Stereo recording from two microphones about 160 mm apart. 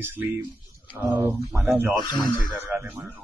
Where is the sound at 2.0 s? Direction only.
25° left (ahead or behind).